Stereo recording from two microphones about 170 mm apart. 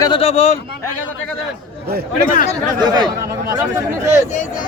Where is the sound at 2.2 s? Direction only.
50° left (ahead or behind).